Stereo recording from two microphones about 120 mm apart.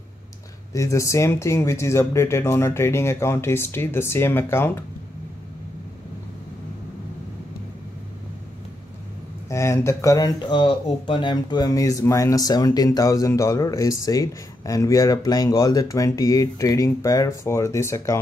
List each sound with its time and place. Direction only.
0.7 s speech: 25° left (ahead or behind)
9.5 s speech: 25° left (ahead or behind)
10.5 s speech: 40° left (ahead or behind); by 18.1 s 25° left (ahead or behind)